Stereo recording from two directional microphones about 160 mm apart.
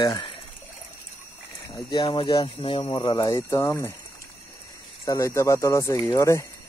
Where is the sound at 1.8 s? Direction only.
30° left (ahead or behind).